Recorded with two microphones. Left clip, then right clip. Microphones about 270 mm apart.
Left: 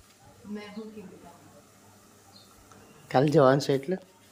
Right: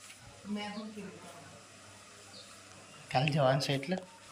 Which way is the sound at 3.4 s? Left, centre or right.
Left.